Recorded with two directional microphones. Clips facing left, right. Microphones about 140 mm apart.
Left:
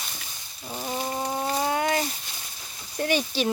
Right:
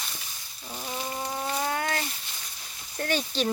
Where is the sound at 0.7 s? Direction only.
25° left (ahead or behind).